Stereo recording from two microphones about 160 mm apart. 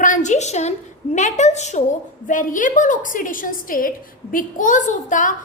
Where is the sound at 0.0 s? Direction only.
50° left (ahead or behind).